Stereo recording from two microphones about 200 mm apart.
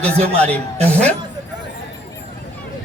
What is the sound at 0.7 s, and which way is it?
Speech, 30° right (ahead or behind).